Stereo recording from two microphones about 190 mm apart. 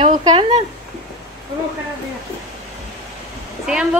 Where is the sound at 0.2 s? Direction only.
30° right (ahead or behind).